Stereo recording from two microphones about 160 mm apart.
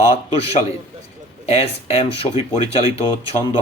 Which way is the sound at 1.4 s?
40° left (ahead or behind).